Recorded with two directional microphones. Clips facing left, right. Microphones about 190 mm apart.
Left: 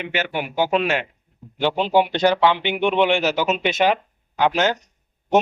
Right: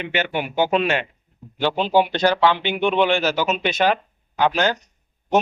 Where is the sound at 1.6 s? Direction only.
20° left (ahead or behind).